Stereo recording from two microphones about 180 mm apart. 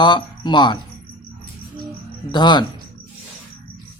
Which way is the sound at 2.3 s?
25° left (ahead or behind).